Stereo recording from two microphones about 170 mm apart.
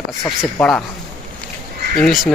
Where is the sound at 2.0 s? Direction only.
Centre (ahead or behind).